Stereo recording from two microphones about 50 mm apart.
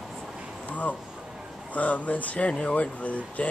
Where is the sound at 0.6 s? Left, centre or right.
Left.